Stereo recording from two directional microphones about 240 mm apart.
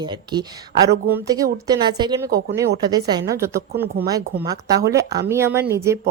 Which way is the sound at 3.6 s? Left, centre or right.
Right.